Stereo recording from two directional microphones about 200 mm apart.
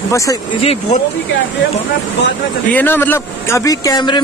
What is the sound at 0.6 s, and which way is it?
Speech, 30° left (ahead or behind).